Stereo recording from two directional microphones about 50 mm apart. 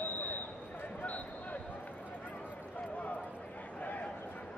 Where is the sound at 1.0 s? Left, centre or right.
Left.